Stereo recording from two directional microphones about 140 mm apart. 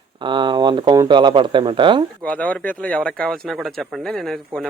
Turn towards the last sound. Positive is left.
turn(degrees=5)  # may be behind; listen again after turning